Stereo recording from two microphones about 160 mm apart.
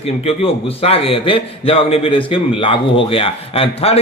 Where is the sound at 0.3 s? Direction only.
35° left (ahead or behind).